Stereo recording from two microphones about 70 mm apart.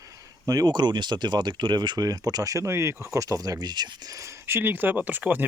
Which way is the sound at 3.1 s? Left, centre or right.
Right.